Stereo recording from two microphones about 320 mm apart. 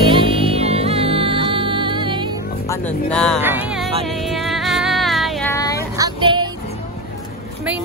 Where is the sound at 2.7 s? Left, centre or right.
Centre.